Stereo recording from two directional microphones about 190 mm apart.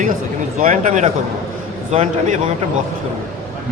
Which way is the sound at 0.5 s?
45° right (ahead or behind).